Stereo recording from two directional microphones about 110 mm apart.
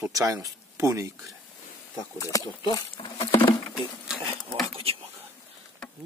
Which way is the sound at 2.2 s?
30° left (ahead or behind).